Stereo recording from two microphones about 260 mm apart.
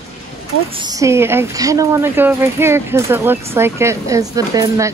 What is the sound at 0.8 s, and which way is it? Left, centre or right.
Speech, centre.